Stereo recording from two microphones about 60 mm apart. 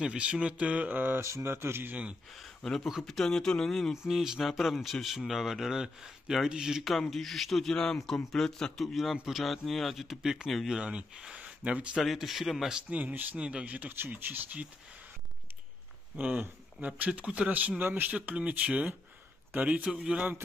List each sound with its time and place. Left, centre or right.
0.0 s speech: centre; by 1.2 s right
1.2 s speech: right
2.3 s speech: centre
2.8 s speech: centre
3.1 s speech: centre
3.9 s speech: centre
6.9 s speech: centre
9.1 s speech: centre
9.4 s speech: centre
10.8 s speech: centre
12.0 s speech: centre
12.9 s speech: right
16.2 s speech: right
19.9 s speech: centre